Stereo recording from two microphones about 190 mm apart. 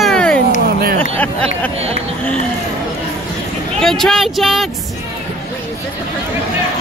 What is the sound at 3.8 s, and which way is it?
Speech, centre (ahead or behind).